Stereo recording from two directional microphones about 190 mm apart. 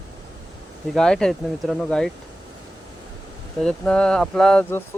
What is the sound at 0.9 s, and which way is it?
Speech, 5° left (ahead or behind).